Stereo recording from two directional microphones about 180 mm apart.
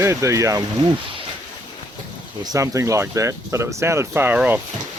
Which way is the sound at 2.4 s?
20° right (ahead or behind).